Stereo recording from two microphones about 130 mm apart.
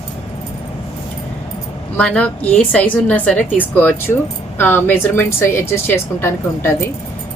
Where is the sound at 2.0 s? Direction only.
10° left (ahead or behind).